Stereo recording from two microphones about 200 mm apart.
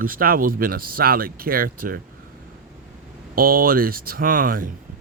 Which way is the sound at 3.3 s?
45° right (ahead or behind).